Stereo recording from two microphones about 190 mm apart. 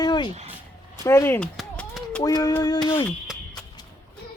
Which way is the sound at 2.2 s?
20° left (ahead or behind).